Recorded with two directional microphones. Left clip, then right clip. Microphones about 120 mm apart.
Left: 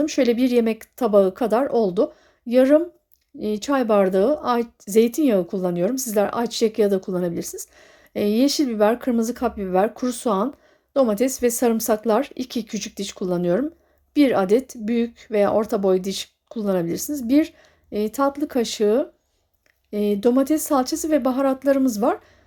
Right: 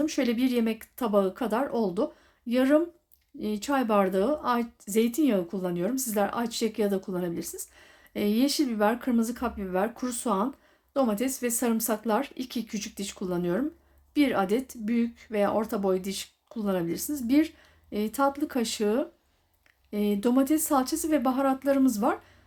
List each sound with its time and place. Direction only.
0.0 s speech: 40° left (ahead or behind)